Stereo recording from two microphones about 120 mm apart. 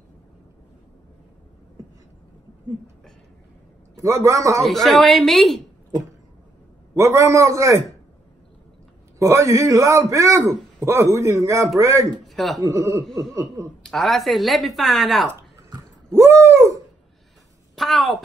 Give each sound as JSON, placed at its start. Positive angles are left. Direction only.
{"t": 3.9, "sound": "a man's voice", "side_deg": -25}
{"t": 4.6, "sound": "speech", "side_deg": 0}
{"t": 7.0, "sound": "a man's voice", "side_deg": -25}
{"t": 9.2, "sound": "a man's voice", "side_deg": -25}
{"t": 12.3, "sound": "speech", "side_deg": 0}
{"t": 12.5, "sound": "a man's voice", "side_deg": -25}
{"t": 13.0, "sound": "speech", "side_deg": 0}
{"t": 16.1, "sound": "a sound", "side_deg": -20}
{"t": 17.7, "sound": "a woman's voice", "side_deg": 0}